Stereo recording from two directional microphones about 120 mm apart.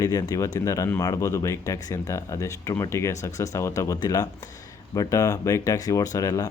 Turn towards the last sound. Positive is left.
turn(degrees=30)  # may be behind; listen again after turning